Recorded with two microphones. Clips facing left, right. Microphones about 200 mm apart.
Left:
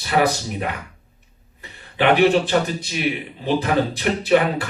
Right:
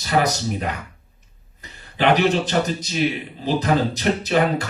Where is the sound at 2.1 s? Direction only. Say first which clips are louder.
Left 4 dB; 40° right (ahead or behind).